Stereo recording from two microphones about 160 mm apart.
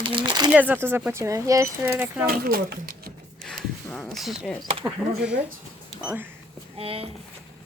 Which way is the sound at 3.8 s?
10° left (ahead or behind).